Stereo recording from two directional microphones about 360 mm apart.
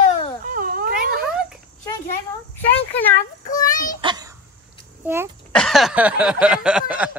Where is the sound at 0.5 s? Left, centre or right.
Right.